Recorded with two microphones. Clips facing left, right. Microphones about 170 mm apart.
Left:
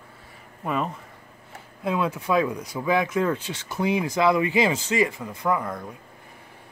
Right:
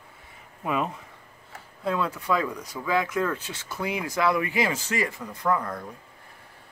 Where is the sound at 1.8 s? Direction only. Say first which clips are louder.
Left 2 dB; 15° left (ahead or behind).